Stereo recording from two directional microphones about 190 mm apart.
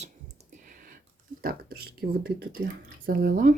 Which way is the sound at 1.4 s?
50° right (ahead or behind).